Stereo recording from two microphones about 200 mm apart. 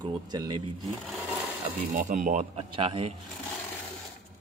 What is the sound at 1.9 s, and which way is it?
Speech, 40° right (ahead or behind).